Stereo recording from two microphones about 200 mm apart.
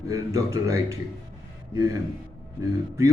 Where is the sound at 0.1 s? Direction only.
15° right (ahead or behind).